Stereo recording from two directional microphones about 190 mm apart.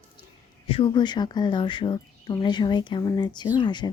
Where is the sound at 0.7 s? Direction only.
25° left (ahead or behind).